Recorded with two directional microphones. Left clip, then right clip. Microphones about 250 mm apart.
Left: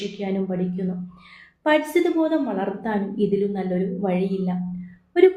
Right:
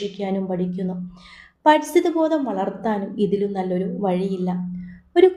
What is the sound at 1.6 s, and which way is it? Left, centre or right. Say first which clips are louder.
Speech: right 3 dB; right.